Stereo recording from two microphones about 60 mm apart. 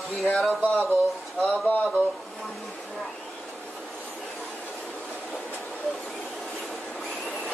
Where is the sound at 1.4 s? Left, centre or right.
Left.